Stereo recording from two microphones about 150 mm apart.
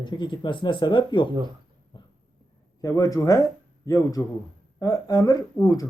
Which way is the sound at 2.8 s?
25° left (ahead or behind).